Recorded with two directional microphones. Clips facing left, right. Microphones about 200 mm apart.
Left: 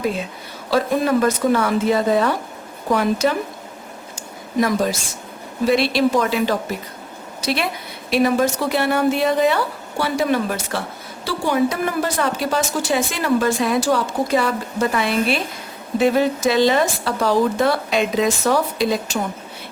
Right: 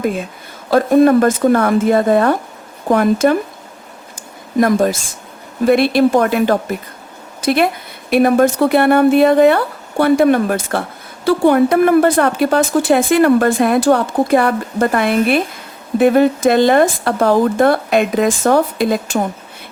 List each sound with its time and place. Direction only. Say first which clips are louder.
0.7 s speech: right 8 dB; 50° right (ahead or behind)
4.6 s a woman's voice: right 6 dB; 50° right (ahead or behind)